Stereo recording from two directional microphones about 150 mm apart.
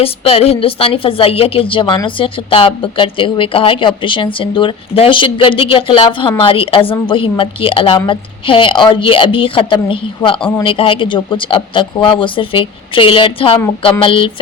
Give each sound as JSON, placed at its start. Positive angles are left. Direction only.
{"t": 0.0, "sound": "a woman's voice", "side_deg": 40}